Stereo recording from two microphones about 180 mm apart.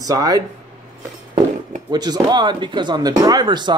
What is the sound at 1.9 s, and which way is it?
Speech, 25° right (ahead or behind).